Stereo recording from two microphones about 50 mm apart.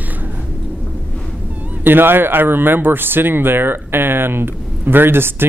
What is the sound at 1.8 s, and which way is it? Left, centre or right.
A man's voice, right.